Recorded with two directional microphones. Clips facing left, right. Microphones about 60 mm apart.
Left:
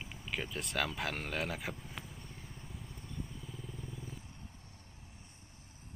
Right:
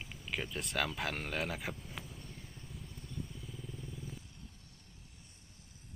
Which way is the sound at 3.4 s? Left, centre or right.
Centre.